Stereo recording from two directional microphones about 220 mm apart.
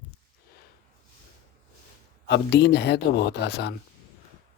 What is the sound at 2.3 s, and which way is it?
Speech, 50° left (ahead or behind).